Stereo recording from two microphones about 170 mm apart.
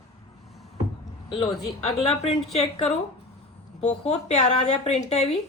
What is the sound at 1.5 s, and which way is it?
Speech, centre (ahead or behind).